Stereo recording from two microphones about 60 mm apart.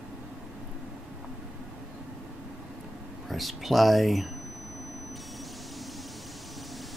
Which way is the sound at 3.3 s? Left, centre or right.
Centre.